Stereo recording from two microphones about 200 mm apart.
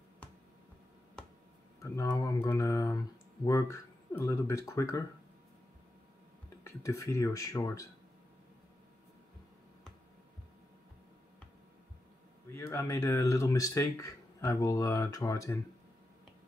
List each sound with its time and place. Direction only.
1.2 s finger snapping: 5° left (ahead or behind)
1.8 s speech: 15° left (ahead or behind)
6.6 s speech: 15° left (ahead or behind)
12.4 s speech: 15° left (ahead or behind)